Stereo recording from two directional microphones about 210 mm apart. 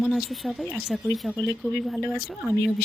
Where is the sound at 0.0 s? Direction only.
Centre (ahead or behind).